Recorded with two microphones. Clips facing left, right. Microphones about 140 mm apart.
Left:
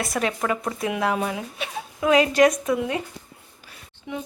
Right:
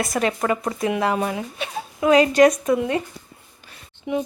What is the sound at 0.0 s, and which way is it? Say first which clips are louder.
Speech: right 3 dB; centre (ahead or behind).